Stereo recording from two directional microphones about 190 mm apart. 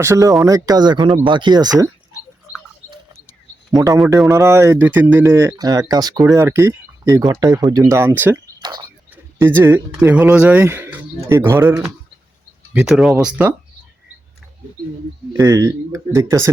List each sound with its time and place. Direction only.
0.0 s speech: 15° right (ahead or behind)
3.8 s speech: 15° right (ahead or behind)
8.6 s a sound: 20° right (ahead or behind)
9.4 s speech: 10° right (ahead or behind)
15.3 s speech: 15° right (ahead or behind)